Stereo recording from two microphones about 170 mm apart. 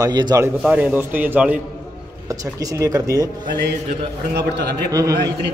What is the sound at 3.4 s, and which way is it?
Mantra, 65° right (ahead or behind).